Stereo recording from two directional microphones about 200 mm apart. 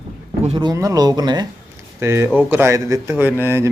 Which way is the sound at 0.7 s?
15° right (ahead or behind).